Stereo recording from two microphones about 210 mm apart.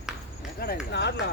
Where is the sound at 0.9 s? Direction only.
55° left (ahead or behind).